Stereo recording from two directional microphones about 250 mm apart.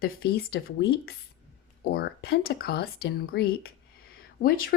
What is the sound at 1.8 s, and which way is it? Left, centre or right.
A woman's voice, left.